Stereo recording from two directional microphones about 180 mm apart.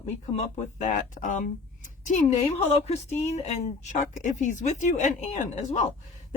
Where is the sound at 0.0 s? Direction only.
40° left (ahead or behind).